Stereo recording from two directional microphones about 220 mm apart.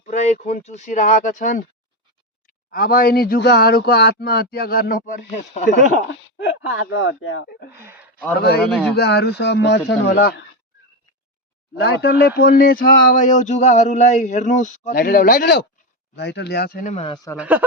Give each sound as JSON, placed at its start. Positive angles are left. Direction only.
{"t": 0.0, "sound": "speech", "side_deg": 30}
{"t": 2.7, "sound": "a man's voice", "side_deg": 40}
{"t": 6.4, "sound": "speech", "side_deg": 60}
{"t": 9.0, "sound": "a man's voice", "side_deg": 50}
{"t": 11.8, "sound": "a man's voice", "side_deg": 50}
{"t": 16.9, "sound": "speech", "side_deg": 25}
{"t": 17.3, "sound": "speech", "side_deg": -5}